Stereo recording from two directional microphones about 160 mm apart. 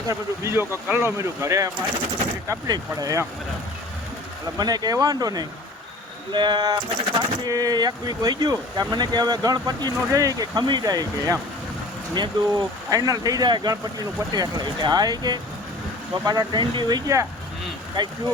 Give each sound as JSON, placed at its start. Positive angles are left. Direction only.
{"t": 0.1, "sound": "speech", "side_deg": -15}
{"t": 4.5, "sound": "speech", "side_deg": -25}